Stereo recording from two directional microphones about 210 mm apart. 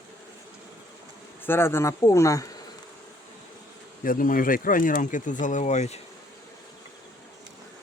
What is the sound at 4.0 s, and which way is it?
Speech, 40° left (ahead or behind).